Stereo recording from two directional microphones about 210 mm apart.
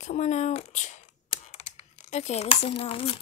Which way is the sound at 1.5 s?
30° left (ahead or behind).